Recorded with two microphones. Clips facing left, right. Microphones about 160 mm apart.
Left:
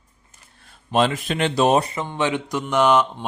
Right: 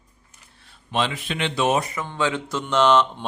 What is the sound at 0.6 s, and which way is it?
Speech, 45° left (ahead or behind).